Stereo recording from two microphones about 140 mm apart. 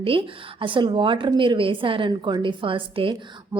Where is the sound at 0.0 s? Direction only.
40° right (ahead or behind).